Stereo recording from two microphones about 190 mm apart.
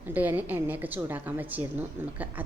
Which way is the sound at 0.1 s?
10° right (ahead or behind).